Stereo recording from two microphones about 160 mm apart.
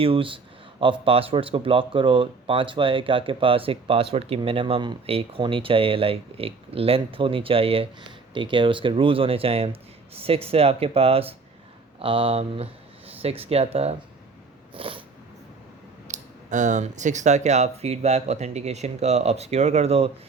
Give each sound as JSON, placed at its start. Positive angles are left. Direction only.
{"t": 0.0, "sound": "speech", "side_deg": -35}
{"t": 14.8, "sound": "cat", "side_deg": -35}
{"t": 16.0, "sound": "speech", "side_deg": -50}